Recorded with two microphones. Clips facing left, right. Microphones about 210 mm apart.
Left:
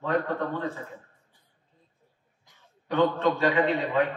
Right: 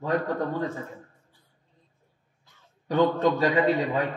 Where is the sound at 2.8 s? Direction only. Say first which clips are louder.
Right 2 dB; 40° right (ahead or behind).